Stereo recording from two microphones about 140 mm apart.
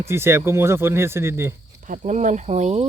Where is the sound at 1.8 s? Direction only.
65° right (ahead or behind).